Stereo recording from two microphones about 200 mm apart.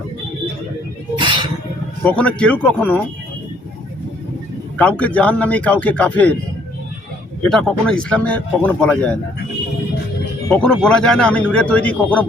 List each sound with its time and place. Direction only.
1.2 s music: 25° right (ahead or behind)
2.0 s a man's voice: 5° left (ahead or behind)
4.8 s a man's voice: 5° left (ahead or behind)
7.4 s speech: 5° left (ahead or behind)
10.5 s speech: 5° left (ahead or behind)